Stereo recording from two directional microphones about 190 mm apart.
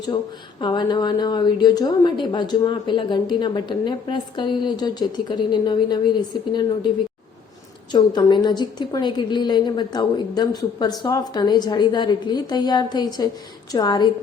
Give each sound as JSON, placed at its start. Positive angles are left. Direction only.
{"t": 0.6, "sound": "a woman's voice", "side_deg": 25}
{"t": 7.9, "sound": "a woman's voice", "side_deg": 20}